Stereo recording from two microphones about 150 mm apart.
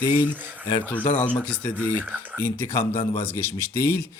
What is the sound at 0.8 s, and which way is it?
Speech, 10° left (ahead or behind).